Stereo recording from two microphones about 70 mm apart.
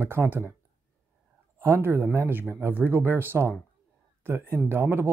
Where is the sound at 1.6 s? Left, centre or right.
Right.